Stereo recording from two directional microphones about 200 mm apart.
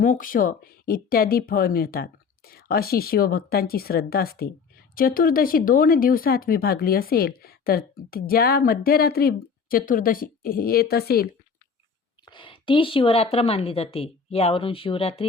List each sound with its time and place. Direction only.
0.0 s speech: 45° left (ahead or behind)
12.2 s a woman's voice: 25° left (ahead or behind)